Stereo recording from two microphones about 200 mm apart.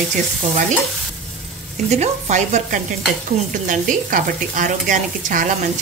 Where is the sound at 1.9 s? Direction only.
35° right (ahead or behind).